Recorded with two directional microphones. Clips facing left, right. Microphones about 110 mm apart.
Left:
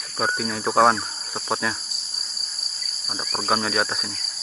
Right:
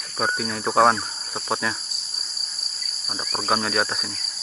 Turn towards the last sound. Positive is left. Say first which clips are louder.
# even
turn(degrees=0)  # may be behind; listen again after turning